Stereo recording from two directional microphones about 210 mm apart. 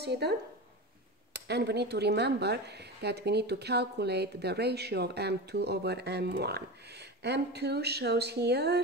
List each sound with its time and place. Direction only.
0.0 s speech: 50° right (ahead or behind)